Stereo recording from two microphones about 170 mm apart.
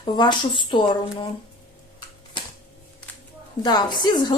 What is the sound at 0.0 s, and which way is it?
A woman's voice, 25° left (ahead or behind).